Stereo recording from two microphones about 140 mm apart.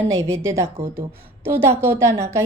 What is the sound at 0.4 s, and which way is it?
A woman's voice, 20° right (ahead or behind).